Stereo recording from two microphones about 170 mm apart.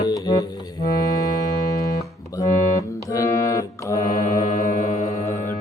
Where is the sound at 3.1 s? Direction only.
20° left (ahead or behind).